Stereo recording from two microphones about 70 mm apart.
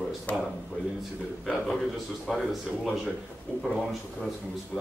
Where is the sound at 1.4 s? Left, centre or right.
Centre.